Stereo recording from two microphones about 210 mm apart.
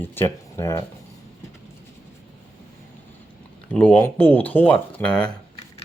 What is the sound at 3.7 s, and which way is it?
Speech, 5° left (ahead or behind).